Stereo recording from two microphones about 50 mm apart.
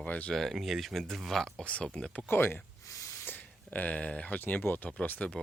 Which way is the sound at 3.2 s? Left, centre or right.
Left.